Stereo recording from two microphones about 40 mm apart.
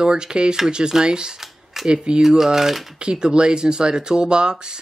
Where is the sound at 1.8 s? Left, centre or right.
Right.